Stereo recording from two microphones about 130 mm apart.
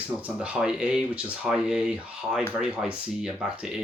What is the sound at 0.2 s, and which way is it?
Speech, 10° right (ahead or behind).